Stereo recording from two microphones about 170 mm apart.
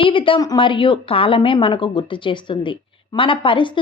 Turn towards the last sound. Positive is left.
turn(degrees=30)  # may be behind; listen again after turning